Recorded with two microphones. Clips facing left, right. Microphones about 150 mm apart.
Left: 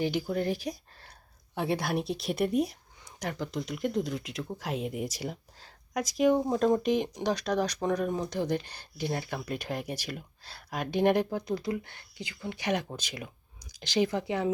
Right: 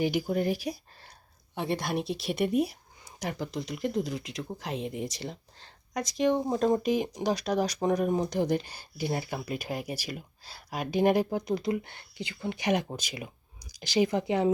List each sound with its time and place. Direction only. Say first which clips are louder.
0.0 s speech: right 2 dB; 10° right (ahead or behind)
11.3 s speech: right 2 dB; 15° right (ahead or behind)